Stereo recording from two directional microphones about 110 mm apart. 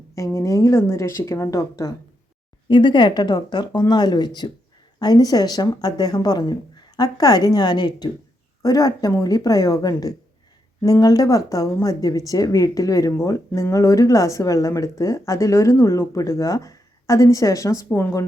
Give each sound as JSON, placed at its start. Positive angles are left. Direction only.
{"t": 0.3, "sound": "speech", "side_deg": 30}
{"t": 2.6, "sound": "a woman's voice", "side_deg": 45}